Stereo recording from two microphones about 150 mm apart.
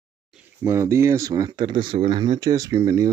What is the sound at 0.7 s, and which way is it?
Speech, 20° right (ahead or behind).